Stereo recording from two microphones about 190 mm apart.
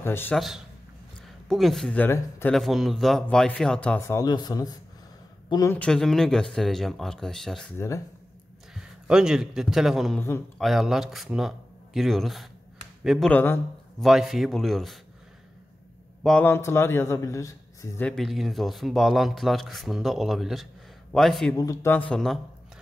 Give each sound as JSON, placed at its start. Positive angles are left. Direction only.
{"t": 0.0, "sound": "speech", "side_deg": 10}
{"t": 1.5, "sound": "speech", "side_deg": 0}
{"t": 2.5, "sound": "speech", "side_deg": 0}
{"t": 5.8, "sound": "speech", "side_deg": 5}
{"t": 7.7, "sound": "speech", "side_deg": 15}
{"t": 8.7, "sound": "a man's voice", "side_deg": -5}
{"t": 13.3, "sound": "a man's voice", "side_deg": 10}
{"t": 14.0, "sound": "speech", "side_deg": 0}
{"t": 16.2, "sound": "speech", "side_deg": 0}
{"t": 16.4, "sound": "speech", "side_deg": 15}
{"t": 18.0, "sound": "speech", "side_deg": 0}
{"t": 21.5, "sound": "speech", "side_deg": 15}